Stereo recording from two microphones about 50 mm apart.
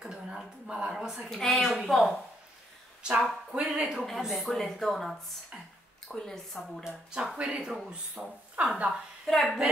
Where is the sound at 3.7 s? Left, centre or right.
Centre.